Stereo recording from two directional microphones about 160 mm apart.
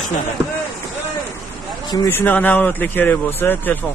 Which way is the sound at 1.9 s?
15° left (ahead or behind).